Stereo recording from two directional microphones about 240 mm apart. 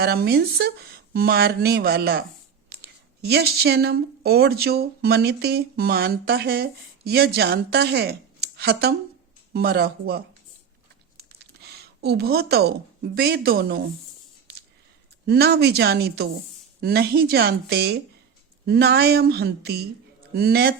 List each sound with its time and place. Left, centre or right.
0.0 s speech: right
15.3 s speech: right